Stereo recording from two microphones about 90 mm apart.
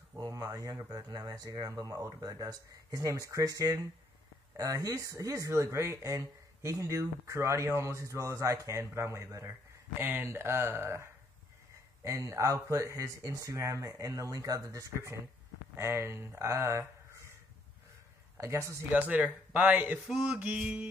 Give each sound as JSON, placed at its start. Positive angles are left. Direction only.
{"t": 0.2, "sound": "speech", "side_deg": -40}
{"t": 15.7, "sound": "speech", "side_deg": -30}
{"t": 18.4, "sound": "speech", "side_deg": -35}
{"t": 18.9, "sound": "a man's voice", "side_deg": -15}